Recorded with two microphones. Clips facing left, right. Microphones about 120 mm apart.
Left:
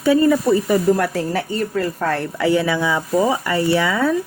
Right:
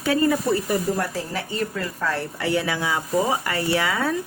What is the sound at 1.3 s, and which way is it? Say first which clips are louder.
Speech: left 6 dB; 45° left (ahead or behind).